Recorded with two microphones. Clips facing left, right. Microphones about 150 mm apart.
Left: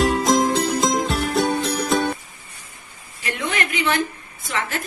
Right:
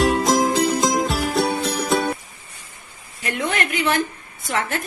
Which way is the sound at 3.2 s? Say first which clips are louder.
Right 2 dB; 45° right (ahead or behind).